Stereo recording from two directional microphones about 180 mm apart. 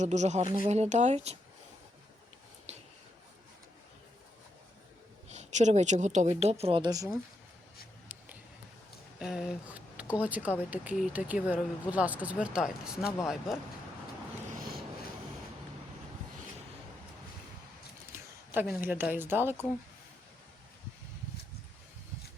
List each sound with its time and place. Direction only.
0.0 s speech: 40° right (ahead or behind)
2.7 s a sound: 40° right (ahead or behind)
5.3 s speech: 40° right (ahead or behind); by 7.1 s 20° right (ahead or behind)
9.1 s speech: centre (ahead or behind)
14.5 s a sound: 55° right (ahead or behind)
18.1 s speech: 10° right (ahead or behind)